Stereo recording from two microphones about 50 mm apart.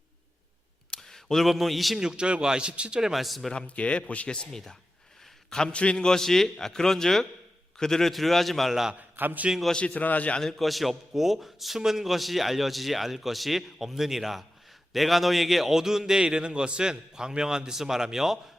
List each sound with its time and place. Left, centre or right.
0.9 s speech: centre
2.0 s a man's voice: centre
3.0 s a man's voice: centre
3.5 s a man's voice: left; by 8.7 s centre
8.7 s a man's voice: centre
9.0 s a man's voice: right
9.7 s a man's voice: left
10.4 s a man's voice: centre